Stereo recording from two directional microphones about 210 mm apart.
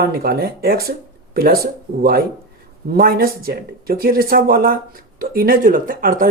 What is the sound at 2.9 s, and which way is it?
Speech, 45° right (ahead or behind).